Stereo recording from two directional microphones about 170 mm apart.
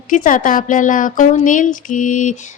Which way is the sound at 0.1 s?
50° left (ahead or behind).